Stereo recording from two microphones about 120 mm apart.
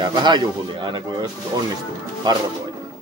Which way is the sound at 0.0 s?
40° right (ahead or behind).